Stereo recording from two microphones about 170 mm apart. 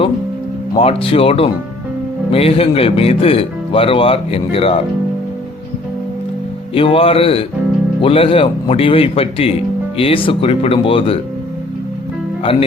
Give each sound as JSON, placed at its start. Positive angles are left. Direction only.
{"t": 0.8, "sound": "speech", "side_deg": 35}
{"t": 6.7, "sound": "speech", "side_deg": 30}
{"t": 12.4, "sound": "speech", "side_deg": 35}